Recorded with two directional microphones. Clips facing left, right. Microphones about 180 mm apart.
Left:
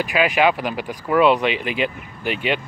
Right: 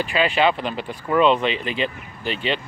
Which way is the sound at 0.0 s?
10° left (ahead or behind).